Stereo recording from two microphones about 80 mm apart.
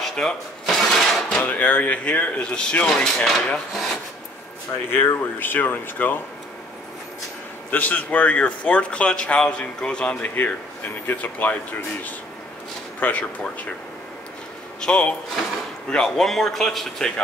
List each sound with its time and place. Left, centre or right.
0.0 s drawer open or close: centre
1.4 s a man's voice: left; by 4.0 s centre
5.4 s speech: left
7.7 s a man's voice: left
13.0 s speech: centre
14.8 s a man's voice: centre